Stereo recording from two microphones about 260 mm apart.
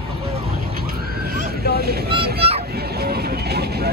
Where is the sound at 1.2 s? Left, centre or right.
Right.